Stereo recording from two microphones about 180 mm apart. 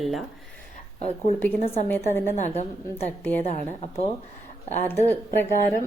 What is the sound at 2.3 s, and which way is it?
A woman's voice, 40° left (ahead or behind).